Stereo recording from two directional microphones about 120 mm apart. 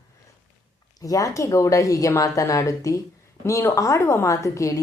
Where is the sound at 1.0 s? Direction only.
30° left (ahead or behind).